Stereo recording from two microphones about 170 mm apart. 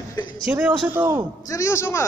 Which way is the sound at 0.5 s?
5° right (ahead or behind).